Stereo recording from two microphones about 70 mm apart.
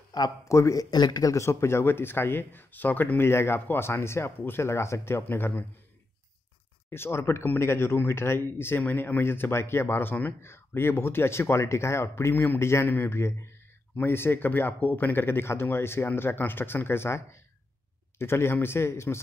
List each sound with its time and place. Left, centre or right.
0.1 s speech: left
0.5 s a man's voice: left
0.8 s a man's voice: left
1.3 s speech: left
6.9 s speech: left